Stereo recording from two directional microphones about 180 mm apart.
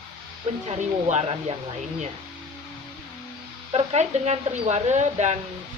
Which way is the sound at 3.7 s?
35° right (ahead or behind).